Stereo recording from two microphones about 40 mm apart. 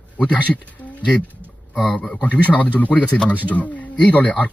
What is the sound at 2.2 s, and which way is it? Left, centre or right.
Speech, left.